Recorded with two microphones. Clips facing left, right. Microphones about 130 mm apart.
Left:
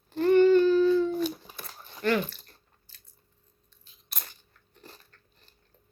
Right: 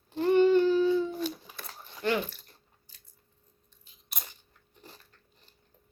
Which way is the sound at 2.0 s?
15° right (ahead or behind).